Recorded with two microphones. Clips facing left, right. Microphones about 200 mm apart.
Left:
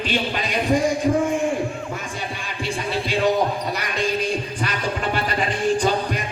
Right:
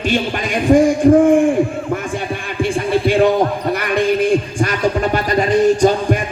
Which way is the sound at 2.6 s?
50° right (ahead or behind).